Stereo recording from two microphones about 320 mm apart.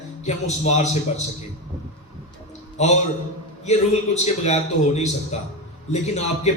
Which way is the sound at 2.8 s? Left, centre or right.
Left.